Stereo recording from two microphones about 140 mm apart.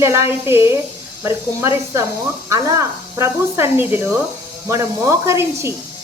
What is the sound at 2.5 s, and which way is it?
Speech, 20° right (ahead or behind).